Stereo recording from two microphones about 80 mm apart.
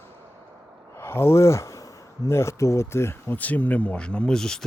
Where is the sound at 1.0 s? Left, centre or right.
Left.